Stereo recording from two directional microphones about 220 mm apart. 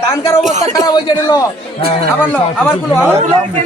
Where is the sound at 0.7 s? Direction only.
15° left (ahead or behind).